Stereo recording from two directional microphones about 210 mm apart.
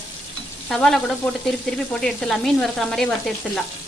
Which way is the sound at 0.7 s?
Centre (ahead or behind).